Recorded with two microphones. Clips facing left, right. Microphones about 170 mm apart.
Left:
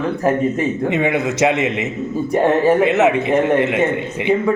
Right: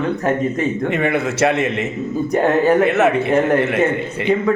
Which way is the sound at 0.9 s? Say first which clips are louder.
Left 1 dB; 15° left (ahead or behind).